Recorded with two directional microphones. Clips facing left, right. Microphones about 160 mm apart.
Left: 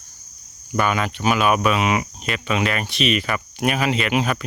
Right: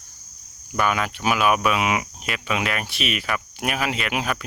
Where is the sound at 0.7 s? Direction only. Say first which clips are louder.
Left 2 dB; centre (ahead or behind).